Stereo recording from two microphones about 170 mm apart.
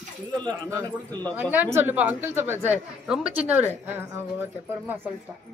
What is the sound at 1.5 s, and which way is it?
A woman's voice, 10° right (ahead or behind).